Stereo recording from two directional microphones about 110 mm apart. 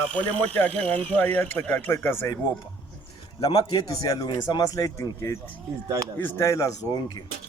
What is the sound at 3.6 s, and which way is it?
Speech, 35° left (ahead or behind).